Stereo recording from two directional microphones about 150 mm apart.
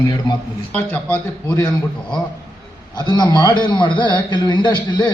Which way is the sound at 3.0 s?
25° left (ahead or behind).